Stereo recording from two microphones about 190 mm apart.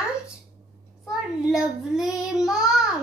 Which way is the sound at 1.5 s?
Centre (ahead or behind).